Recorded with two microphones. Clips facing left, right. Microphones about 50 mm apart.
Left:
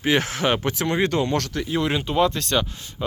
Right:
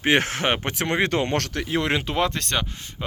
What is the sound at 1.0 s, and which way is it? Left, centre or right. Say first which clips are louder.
Speech: even; right.